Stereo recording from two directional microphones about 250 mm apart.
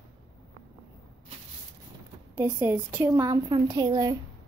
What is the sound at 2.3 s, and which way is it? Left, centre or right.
A woman's voice, centre.